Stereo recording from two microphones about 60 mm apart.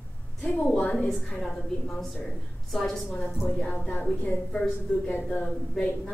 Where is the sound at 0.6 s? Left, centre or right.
Centre.